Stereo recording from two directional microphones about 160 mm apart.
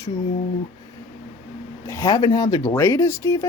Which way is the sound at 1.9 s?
20° left (ahead or behind).